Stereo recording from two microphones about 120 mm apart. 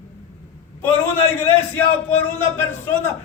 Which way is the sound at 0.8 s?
20° left (ahead or behind).